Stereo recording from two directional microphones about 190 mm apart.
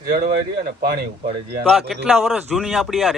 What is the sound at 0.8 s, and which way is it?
Speech, 55° right (ahead or behind).